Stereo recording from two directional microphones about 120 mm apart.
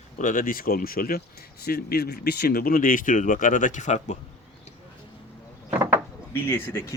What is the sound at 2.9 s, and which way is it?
Speech, 90° left.